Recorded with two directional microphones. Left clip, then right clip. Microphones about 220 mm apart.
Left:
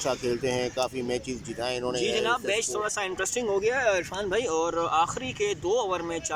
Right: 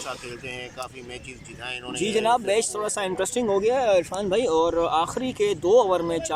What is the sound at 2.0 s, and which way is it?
Speech, 25° right (ahead or behind).